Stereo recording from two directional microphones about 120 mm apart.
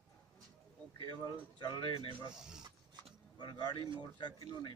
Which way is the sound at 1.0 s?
40° left (ahead or behind).